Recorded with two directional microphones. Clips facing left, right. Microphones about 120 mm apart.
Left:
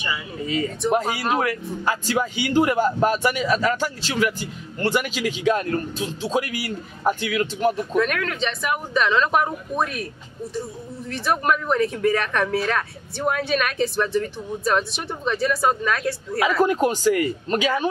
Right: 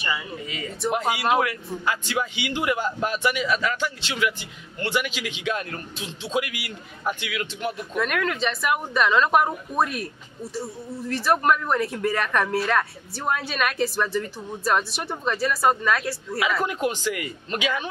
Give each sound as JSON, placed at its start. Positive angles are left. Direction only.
{"t": 0.5, "sound": "speech", "side_deg": 40}
{"t": 8.0, "sound": "speech", "side_deg": -5}
{"t": 16.3, "sound": "speech", "side_deg": 40}